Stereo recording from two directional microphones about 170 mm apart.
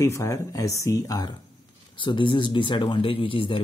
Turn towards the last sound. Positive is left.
turn(degrees=30)  # may be behind; listen again after turning